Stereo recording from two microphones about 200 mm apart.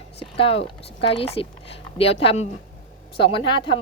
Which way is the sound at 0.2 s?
30° left (ahead or behind).